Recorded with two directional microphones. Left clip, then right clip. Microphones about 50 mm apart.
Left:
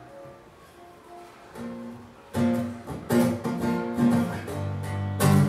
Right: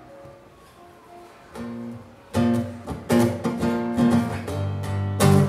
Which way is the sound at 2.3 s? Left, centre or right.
Right.